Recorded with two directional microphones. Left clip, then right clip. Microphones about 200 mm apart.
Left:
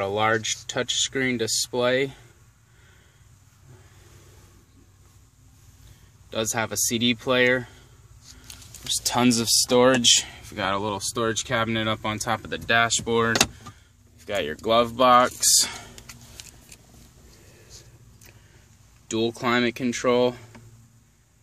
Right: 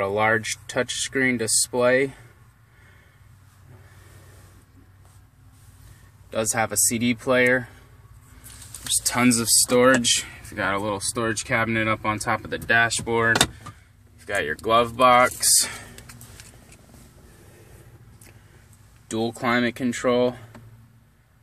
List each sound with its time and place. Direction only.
0.0 s speech: 20° left (ahead or behind)
6.6 s speech: 10° left (ahead or behind)
9.0 s speech: 20° left (ahead or behind)
19.1 s speech: 10° left (ahead or behind)